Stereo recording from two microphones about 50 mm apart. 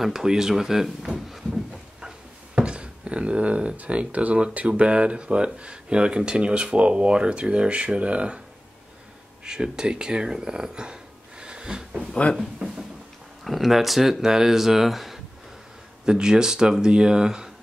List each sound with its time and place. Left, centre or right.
0.0 s speech: centre
2.0 s speech: centre
9.4 s speech: centre
12.1 s speech: left
12.6 s a sound: centre
13.4 s speech: centre
16.1 s speech: centre